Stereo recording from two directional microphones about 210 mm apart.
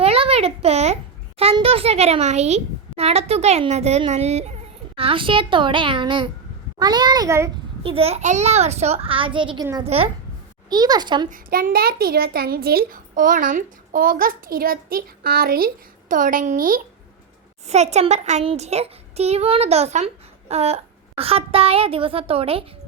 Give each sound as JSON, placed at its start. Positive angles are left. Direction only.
{"t": 0.0, "sound": "a sound", "side_deg": -30}
{"t": 1.4, "sound": "a child's voice", "side_deg": -25}
{"t": 7.9, "sound": "a child's voice", "side_deg": -30}
{"t": 11.3, "sound": "a child's voice", "side_deg": -40}